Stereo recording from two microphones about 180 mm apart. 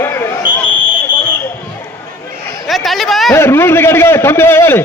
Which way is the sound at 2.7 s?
Centre (ahead or behind).